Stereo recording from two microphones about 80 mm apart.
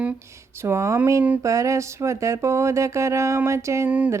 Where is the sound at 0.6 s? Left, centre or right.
Right.